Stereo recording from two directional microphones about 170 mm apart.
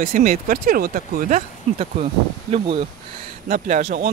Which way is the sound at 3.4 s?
45° right (ahead or behind).